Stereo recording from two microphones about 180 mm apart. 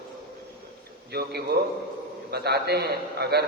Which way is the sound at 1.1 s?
65° right (ahead or behind).